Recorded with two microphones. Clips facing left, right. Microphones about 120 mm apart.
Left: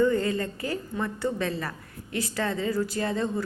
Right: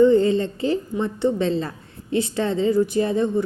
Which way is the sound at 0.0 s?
25° right (ahead or behind).